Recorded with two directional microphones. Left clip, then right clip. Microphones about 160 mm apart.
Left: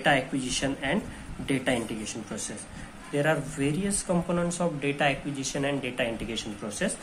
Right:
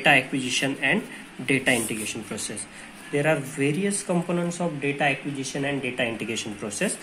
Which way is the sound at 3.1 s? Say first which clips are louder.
Right 3 dB; 25° right (ahead or behind).